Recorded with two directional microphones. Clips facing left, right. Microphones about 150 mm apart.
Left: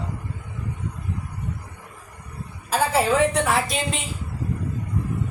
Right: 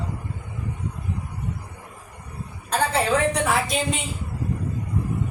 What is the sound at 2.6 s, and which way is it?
A man's voice, 5° left (ahead or behind).